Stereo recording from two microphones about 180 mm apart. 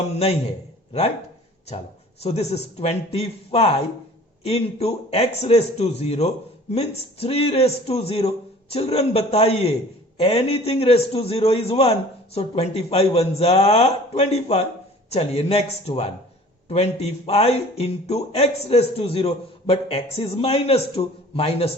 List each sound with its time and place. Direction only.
2.2 s speech: 35° left (ahead or behind)